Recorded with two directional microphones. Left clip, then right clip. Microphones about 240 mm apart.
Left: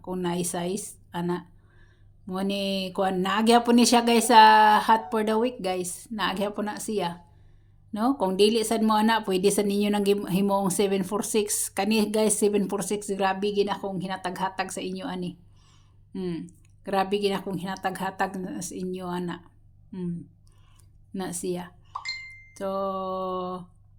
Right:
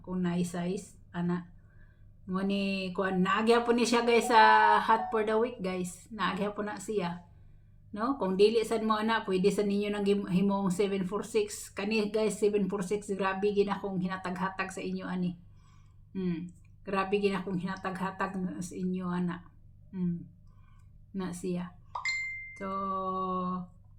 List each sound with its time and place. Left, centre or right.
0.0 s a woman's voice: left
21.1 s a woman's voice: left
21.9 s plop: centre
22.5 s a woman's voice: left